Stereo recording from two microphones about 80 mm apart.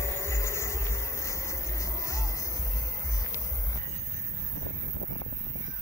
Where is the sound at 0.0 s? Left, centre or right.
Left.